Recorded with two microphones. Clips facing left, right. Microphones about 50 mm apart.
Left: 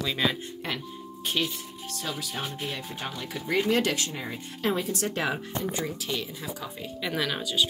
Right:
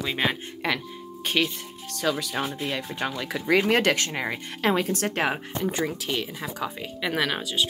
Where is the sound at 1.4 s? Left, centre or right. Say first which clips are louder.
Right 5 dB; right.